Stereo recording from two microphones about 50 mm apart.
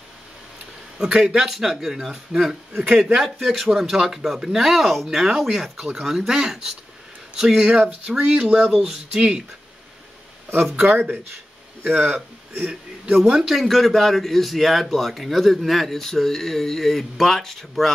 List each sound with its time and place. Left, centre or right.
0.9 s speech: centre
1.5 s a man's voice: centre
11.8 s speech: centre
13.3 s speech: centre
13.7 s a man's voice: centre